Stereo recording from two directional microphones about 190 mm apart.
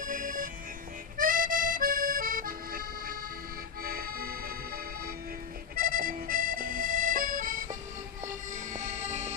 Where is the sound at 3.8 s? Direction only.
50° right (ahead or behind).